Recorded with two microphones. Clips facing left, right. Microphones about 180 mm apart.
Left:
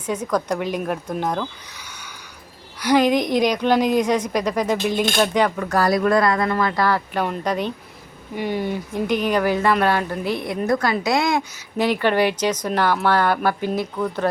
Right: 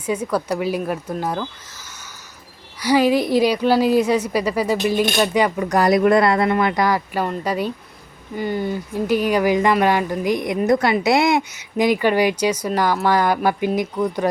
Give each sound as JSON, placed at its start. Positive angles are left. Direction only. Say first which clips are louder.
{"t": 0.0, "sound": "speech", "louder": "right 1 dB", "side_deg": -10}
{"t": 2.8, "sound": "speech", "louder": "right 1 dB", "side_deg": -10}
{"t": 11.8, "sound": "speech", "louder": "right 2 dB", "side_deg": -10}